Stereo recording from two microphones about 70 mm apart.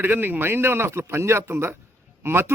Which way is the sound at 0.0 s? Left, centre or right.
Right.